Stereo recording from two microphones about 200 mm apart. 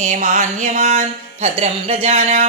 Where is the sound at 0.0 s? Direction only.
40° right (ahead or behind).